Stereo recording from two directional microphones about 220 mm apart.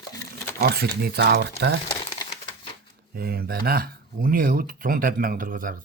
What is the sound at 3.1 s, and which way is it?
Speech, 45° right (ahead or behind).